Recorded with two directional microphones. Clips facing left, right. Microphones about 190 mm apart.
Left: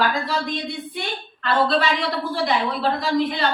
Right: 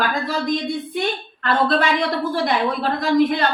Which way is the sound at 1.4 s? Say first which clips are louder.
Right 1 dB; 50° right (ahead or behind).